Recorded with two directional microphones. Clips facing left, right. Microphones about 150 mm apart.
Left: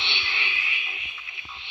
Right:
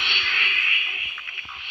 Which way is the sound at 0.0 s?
25° left (ahead or behind).